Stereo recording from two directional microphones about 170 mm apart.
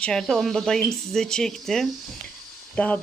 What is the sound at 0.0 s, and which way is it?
Speech, 5° left (ahead or behind).